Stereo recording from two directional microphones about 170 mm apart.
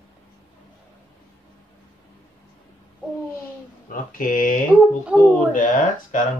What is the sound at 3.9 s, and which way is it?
Speech, 55° left (ahead or behind).